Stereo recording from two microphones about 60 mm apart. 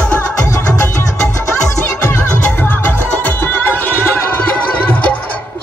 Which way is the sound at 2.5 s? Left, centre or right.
Left.